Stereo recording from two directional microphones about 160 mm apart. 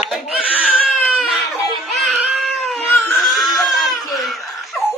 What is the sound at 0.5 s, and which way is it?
Baby cry, centre (ahead or behind).